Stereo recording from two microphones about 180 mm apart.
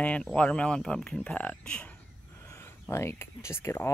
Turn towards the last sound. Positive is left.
turn(degrees=15)  # may be behind; listen again after turning